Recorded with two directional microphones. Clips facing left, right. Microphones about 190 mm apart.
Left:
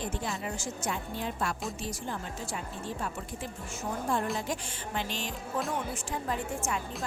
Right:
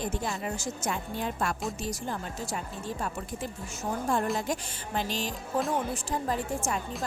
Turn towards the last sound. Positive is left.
turn(degrees=-35)  # may be behind; listen again after turning